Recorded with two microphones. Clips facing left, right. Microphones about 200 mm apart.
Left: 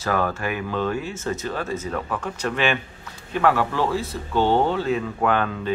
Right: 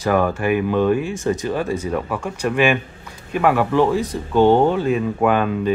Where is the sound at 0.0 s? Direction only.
15° right (ahead or behind).